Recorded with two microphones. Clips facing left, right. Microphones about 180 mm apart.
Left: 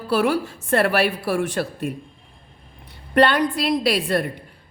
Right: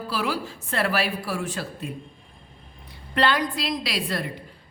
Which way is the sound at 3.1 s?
60° left (ahead or behind).